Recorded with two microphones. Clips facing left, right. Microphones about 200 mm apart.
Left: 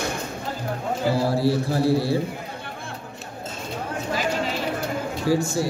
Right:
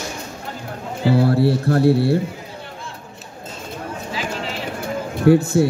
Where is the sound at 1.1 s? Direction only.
60° right (ahead or behind).